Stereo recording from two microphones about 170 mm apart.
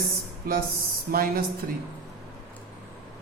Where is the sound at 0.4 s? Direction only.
60° right (ahead or behind).